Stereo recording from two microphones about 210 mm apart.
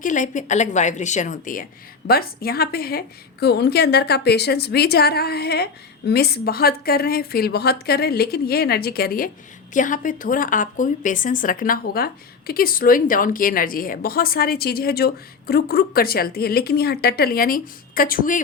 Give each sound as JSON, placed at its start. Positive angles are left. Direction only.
{"t": 0.0, "sound": "a woman's voice", "side_deg": 35}